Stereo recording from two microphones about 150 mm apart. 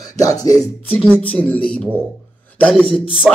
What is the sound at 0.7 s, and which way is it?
A man's voice, 10° left (ahead or behind).